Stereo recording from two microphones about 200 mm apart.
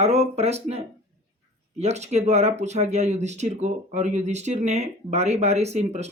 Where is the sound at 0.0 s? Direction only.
30° right (ahead or behind).